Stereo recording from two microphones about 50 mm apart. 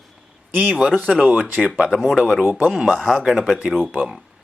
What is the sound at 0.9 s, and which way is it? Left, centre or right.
Speech, right.